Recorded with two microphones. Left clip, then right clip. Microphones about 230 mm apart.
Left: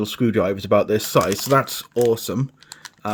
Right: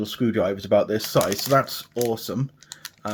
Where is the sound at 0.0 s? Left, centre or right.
Left.